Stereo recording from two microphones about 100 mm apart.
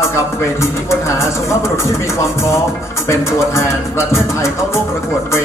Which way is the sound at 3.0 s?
30° left (ahead or behind).